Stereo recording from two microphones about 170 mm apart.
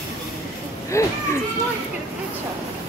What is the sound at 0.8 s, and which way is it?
Speech, 15° left (ahead or behind).